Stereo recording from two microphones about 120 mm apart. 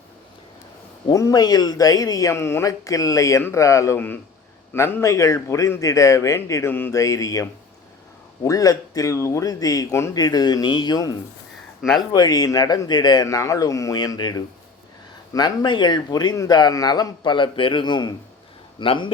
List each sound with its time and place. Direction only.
1.1 s a man's voice: 30° left (ahead or behind)
8.4 s a man's voice: 30° left (ahead or behind)
11.8 s speech: centre (ahead or behind)
12.1 s a man's voice: 35° left (ahead or behind)